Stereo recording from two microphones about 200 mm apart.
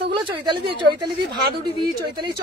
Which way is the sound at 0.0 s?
25° right (ahead or behind).